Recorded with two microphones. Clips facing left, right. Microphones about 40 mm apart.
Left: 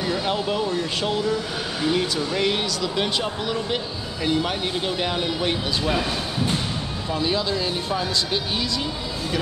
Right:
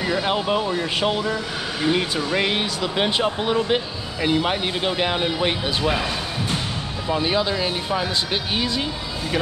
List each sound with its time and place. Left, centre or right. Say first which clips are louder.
0.0 s speech: right 2 dB; right
7.1 s speech: right 3 dB; right